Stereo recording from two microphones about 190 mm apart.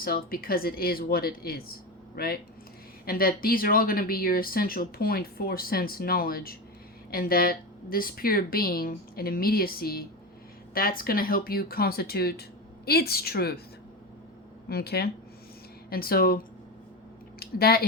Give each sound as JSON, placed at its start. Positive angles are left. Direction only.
{"t": 0.0, "sound": "speech", "side_deg": 50}
{"t": 14.7, "sound": "speech", "side_deg": 55}
{"t": 17.4, "sound": "speech", "side_deg": 55}